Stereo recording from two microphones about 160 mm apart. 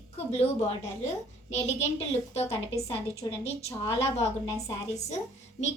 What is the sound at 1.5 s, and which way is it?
Speech, 45° left (ahead or behind).